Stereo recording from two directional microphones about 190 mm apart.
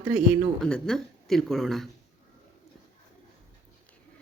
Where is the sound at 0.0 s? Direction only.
Centre (ahead or behind).